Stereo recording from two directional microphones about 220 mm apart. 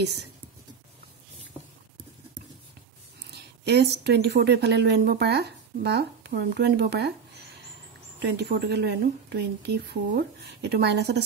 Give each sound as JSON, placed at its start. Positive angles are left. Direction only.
{"t": 3.3, "sound": "a woman's voice", "side_deg": -50}
{"t": 8.2, "sound": "a woman's voice", "side_deg": -50}